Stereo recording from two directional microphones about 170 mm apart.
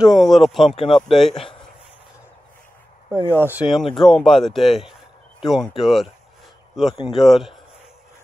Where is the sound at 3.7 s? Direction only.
Centre (ahead or behind).